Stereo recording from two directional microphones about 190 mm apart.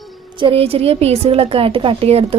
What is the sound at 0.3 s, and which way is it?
A woman's voice, 30° right (ahead or behind).